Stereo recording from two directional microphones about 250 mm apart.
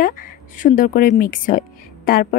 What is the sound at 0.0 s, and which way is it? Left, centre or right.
Speech, left.